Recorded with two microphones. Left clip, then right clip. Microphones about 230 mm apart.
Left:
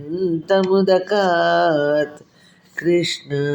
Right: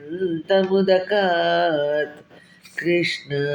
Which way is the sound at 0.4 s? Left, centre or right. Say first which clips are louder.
Left 2 dB; left.